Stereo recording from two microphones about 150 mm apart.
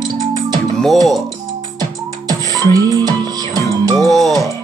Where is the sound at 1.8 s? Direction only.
25° right (ahead or behind).